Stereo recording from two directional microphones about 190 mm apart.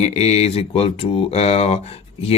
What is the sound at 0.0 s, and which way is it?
Speech, 35° left (ahead or behind).